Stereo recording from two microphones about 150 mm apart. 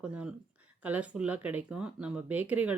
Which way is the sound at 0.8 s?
10° right (ahead or behind).